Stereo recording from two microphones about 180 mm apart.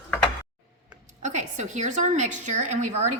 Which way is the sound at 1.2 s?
40° right (ahead or behind).